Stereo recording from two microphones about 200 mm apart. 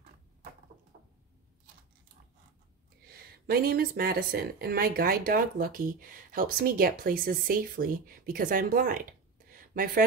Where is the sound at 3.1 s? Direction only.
50° right (ahead or behind).